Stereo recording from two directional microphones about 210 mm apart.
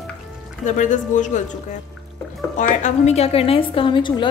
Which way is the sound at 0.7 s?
35° left (ahead or behind).